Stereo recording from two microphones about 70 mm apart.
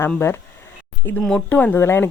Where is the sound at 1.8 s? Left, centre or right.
Left.